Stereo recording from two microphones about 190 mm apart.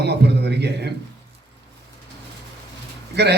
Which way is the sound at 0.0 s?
60° right (ahead or behind).